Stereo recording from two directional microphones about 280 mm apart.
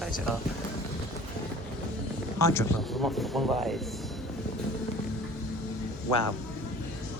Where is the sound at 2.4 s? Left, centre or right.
Centre.